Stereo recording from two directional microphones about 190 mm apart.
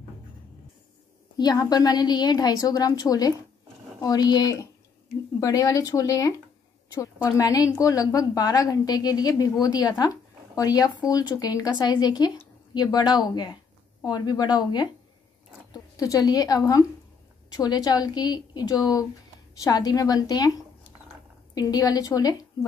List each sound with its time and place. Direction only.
1.4 s a woman's voice: 20° left (ahead or behind)
7.3 s a woman's voice: 15° left (ahead or behind)
21.5 s a woman's voice: 20° left (ahead or behind)